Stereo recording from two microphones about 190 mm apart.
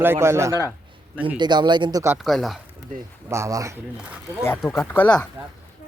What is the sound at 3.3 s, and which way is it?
Speech, 15° right (ahead or behind).